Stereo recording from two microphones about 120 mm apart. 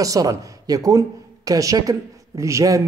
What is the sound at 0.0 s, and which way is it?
Speech, 30° right (ahead or behind).